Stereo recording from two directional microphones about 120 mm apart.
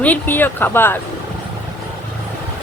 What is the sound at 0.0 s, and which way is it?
Speech, 15° left (ahead or behind).